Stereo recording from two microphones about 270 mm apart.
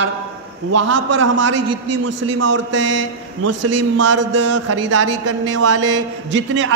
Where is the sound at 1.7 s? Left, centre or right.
Right.